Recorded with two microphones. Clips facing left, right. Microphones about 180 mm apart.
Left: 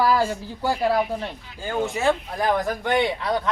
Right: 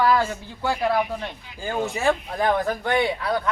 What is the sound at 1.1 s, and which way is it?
Speech, 15° left (ahead or behind).